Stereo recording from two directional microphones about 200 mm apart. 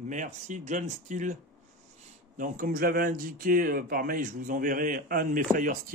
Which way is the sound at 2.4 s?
45° right (ahead or behind).